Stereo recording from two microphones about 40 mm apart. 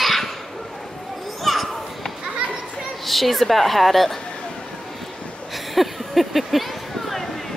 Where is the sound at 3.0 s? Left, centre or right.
Centre.